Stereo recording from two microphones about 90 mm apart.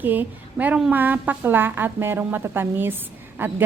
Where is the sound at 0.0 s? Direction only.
20° right (ahead or behind).